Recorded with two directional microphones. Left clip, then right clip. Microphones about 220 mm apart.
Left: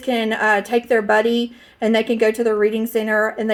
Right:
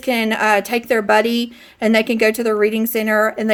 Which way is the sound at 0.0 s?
50° right (ahead or behind).